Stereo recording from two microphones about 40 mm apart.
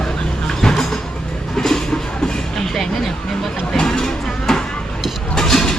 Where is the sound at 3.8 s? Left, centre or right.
Centre.